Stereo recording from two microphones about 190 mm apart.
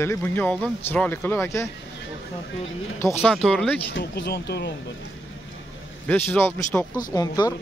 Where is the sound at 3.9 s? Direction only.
60° left (ahead or behind).